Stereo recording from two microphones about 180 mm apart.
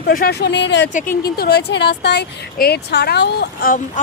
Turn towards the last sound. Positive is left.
turn(degrees=50)  # may be behind; listen again after turning